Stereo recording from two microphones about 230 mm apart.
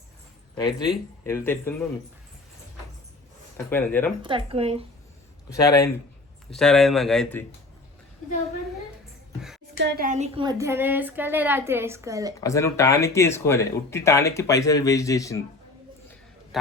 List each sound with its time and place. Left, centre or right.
1.2 s speech: centre
3.7 s speech: centre
4.2 s speech: right
5.5 s speech: centre
6.5 s speech: centre
9.7 s a woman's voice: right; by 12.3 s centre
12.4 s speech: centre